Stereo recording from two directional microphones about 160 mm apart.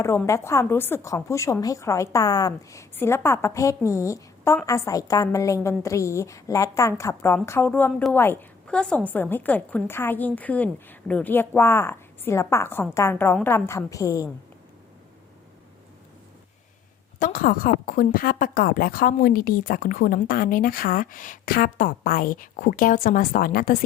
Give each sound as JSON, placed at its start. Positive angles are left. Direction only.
{"t": 0.3, "sound": "a woman's voice", "side_deg": 20}
{"t": 17.2, "sound": "a woman's voice", "side_deg": 55}